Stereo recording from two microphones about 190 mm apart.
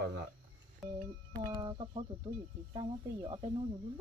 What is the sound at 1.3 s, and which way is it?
Speech, 25° right (ahead or behind).